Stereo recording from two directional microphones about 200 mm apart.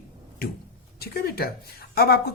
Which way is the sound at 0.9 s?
50° left (ahead or behind).